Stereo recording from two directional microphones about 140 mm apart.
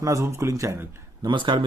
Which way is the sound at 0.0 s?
20° right (ahead or behind).